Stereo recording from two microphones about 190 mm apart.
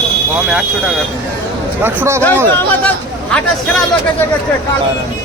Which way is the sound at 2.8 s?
5° left (ahead or behind).